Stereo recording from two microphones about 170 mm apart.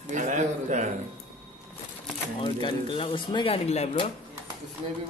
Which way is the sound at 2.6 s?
30° left (ahead or behind).